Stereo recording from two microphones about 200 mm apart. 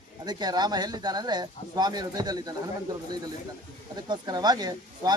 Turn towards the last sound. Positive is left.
turn(degrees=-20)  # may be behind; listen again after turning